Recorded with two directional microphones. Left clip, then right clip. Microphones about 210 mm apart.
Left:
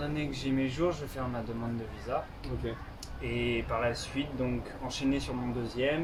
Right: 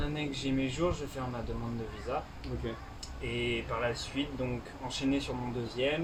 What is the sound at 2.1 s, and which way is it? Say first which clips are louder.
Speech: left 2 dB; 15° left (ahead or behind).